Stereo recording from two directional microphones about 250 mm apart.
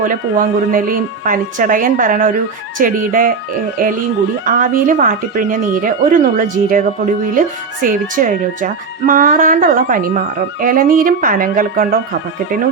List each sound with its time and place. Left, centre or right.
0.0 s speech: right
4.4 s speech: right